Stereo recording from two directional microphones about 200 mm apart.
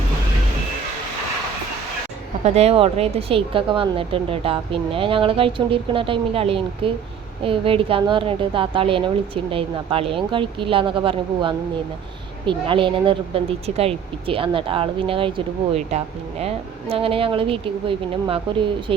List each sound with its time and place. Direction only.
2.4 s speech: 30° right (ahead or behind)